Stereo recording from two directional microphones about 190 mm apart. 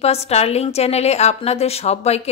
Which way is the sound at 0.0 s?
35° left (ahead or behind).